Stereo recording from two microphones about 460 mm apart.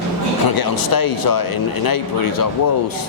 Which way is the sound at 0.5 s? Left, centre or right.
Left.